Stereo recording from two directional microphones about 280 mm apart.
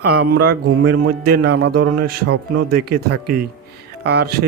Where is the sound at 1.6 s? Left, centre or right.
Right.